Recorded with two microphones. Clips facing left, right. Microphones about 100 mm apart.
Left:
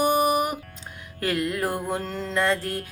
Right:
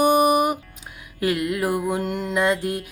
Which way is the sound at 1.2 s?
5° right (ahead or behind).